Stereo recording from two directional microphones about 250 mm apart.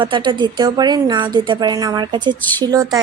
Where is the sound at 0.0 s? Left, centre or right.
Centre.